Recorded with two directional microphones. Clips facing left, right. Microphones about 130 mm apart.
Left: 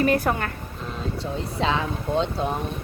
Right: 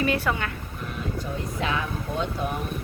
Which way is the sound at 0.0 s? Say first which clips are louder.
Left 4 dB; 40° left (ahead or behind).